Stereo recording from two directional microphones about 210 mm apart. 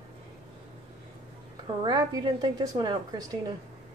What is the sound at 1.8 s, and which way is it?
A woman's voice, 20° right (ahead or behind).